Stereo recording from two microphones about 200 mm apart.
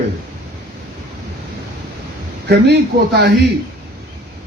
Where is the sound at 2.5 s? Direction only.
55° right (ahead or behind).